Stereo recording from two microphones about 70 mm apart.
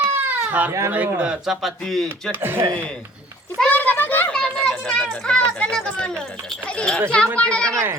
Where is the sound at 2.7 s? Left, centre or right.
Centre.